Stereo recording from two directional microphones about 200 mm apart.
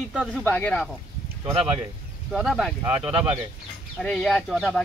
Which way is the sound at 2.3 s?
Centre (ahead or behind).